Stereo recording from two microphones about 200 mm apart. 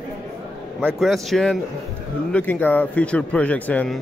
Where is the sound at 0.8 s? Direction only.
Centre (ahead or behind).